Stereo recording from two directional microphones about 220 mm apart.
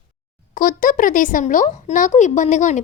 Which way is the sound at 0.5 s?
40° left (ahead or behind).